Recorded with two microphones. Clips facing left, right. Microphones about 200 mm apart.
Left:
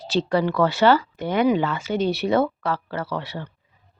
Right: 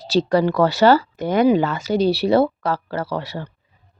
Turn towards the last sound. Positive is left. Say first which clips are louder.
# right 3 dB
turn(degrees=-40)  # may be behind; listen again after turning